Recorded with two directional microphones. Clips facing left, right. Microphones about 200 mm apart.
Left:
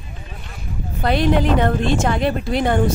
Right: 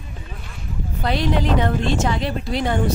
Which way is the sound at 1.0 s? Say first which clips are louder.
Left 4 dB; 55° left (ahead or behind).